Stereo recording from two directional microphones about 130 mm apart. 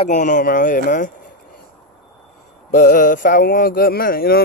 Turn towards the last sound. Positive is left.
turn(degrees=90)